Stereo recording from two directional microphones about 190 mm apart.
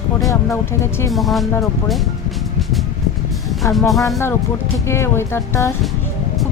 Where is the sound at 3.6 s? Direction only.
Centre (ahead or behind).